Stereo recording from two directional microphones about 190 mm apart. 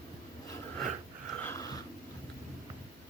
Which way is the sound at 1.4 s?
15° left (ahead or behind).